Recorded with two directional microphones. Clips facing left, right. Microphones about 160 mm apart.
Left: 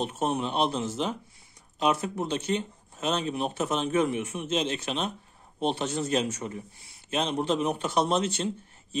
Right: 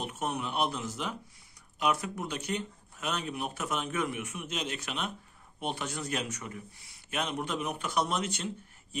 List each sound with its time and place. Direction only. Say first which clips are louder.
0.0 s speech: left 6 dB; 30° left (ahead or behind)